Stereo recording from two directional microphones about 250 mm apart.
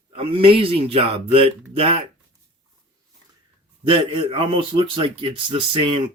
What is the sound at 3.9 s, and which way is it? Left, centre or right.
Speech, right.